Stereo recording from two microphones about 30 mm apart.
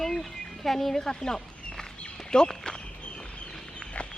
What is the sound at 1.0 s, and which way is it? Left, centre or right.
Speech, left.